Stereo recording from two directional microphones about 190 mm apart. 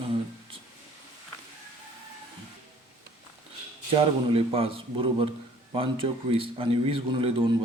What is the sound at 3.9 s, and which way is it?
Speech, 30° right (ahead or behind).